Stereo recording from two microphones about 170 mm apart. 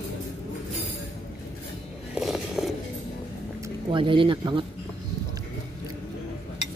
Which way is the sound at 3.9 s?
30° right (ahead or behind).